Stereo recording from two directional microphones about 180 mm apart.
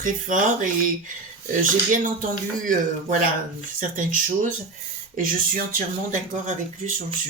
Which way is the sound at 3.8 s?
45° right (ahead or behind).